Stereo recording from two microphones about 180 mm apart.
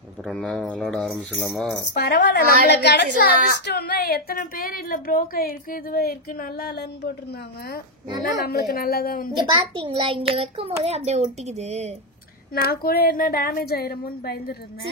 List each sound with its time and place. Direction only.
0.2 s speech: centre (ahead or behind)
2.0 s a woman's voice: 65° left (ahead or behind)
8.2 s speech: 60° left (ahead or behind)
9.4 s a child's voice: 30° right (ahead or behind)
12.6 s speech: 55° left (ahead or behind)